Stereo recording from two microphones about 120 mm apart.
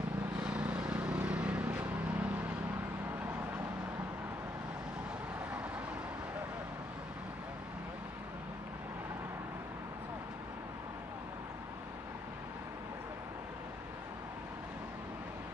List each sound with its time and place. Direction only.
0.4 s vehicle: 10° right (ahead or behind)